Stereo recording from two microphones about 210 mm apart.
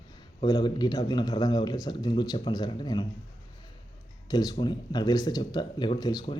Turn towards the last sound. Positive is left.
turn(degrees=20)  # may be behind; listen again after turning